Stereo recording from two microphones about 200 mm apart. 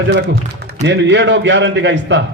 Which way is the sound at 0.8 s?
60° right (ahead or behind).